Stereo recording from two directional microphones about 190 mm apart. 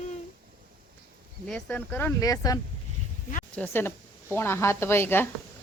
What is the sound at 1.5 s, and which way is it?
A woman's voice, 5° left (ahead or behind).